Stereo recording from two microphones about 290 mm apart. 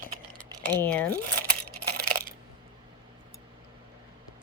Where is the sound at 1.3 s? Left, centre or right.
Right.